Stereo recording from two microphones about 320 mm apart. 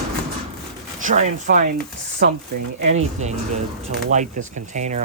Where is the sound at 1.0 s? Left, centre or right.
Right.